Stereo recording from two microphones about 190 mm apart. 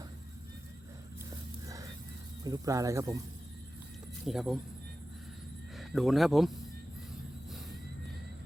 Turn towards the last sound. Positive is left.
turn(degrees=0)  # may be behind; listen again after turning